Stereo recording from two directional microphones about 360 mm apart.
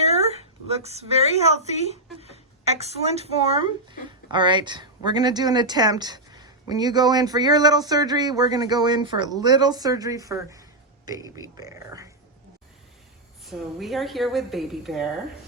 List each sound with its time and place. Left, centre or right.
0.0 s a sound: centre
2.7 s speech: centre
13.4 s a woman's voice: centre